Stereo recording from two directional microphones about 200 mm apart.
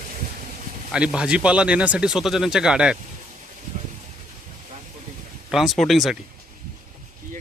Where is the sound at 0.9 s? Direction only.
5° right (ahead or behind).